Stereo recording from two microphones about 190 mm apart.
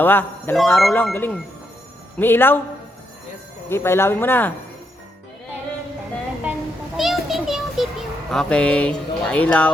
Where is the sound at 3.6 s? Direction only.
10° left (ahead or behind).